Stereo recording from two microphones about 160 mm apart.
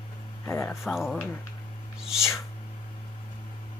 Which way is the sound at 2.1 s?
15° left (ahead or behind).